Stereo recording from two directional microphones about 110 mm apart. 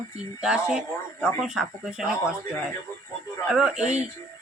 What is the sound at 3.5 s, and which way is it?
Speech, 5° right (ahead or behind).